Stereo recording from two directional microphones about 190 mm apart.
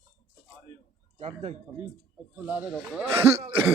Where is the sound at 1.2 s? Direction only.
30° right (ahead or behind).